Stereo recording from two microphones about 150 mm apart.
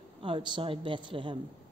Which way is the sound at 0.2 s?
35° right (ahead or behind).